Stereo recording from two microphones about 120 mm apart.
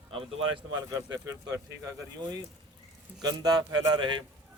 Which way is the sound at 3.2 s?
35° right (ahead or behind).